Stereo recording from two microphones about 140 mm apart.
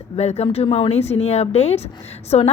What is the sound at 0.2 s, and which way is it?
Speech, 50° left (ahead or behind).